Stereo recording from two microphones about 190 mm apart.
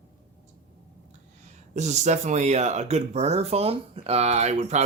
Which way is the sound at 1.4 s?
40° right (ahead or behind).